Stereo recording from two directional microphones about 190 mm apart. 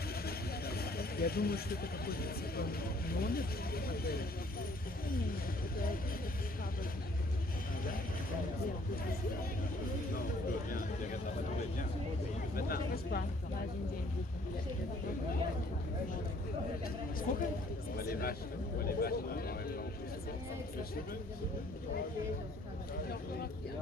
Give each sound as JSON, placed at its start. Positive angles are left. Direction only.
{"t": 0.3, "sound": "speech", "side_deg": 55}
{"t": 5.7, "sound": "a man's voice", "side_deg": 50}
{"t": 12.5, "sound": "a man's voice", "side_deg": 50}
{"t": 17.3, "sound": "a man's voice", "side_deg": 45}